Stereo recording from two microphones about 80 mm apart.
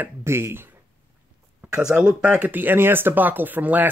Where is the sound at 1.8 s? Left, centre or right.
Centre.